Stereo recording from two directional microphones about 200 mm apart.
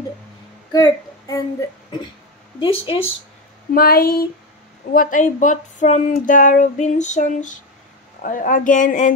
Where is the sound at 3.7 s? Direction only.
50° left (ahead or behind).